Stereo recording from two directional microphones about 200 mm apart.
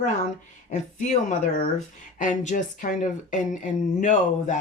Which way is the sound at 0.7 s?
35° left (ahead or behind).